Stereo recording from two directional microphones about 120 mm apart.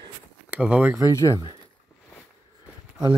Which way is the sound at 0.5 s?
10° right (ahead or behind).